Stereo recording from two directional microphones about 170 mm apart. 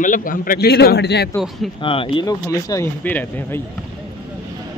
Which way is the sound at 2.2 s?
20° left (ahead or behind).